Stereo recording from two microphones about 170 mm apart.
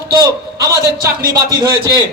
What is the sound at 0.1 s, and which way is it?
A man's voice, 20° right (ahead or behind).